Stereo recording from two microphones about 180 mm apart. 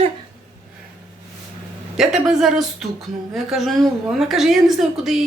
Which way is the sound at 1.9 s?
5° right (ahead or behind).